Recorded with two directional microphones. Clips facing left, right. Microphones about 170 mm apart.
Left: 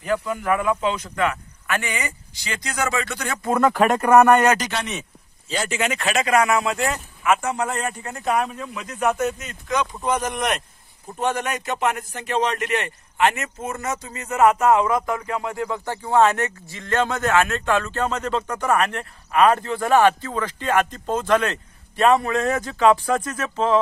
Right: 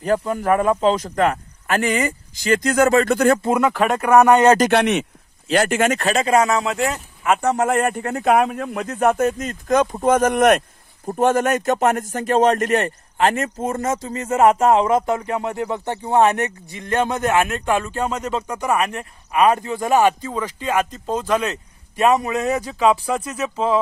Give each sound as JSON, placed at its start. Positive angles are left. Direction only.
{"t": 0.0, "sound": "speech", "side_deg": -40}
{"t": 3.6, "sound": "speech", "side_deg": 0}
{"t": 4.6, "sound": "speech", "side_deg": -60}
{"t": 5.9, "sound": "speech", "side_deg": -35}
{"t": 7.4, "sound": "speech", "side_deg": -45}